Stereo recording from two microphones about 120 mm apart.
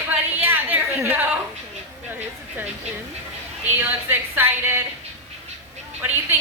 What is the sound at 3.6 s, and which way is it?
Speech, 15° right (ahead or behind).